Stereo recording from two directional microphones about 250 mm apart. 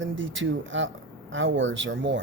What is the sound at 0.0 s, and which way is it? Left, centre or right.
Speech, right.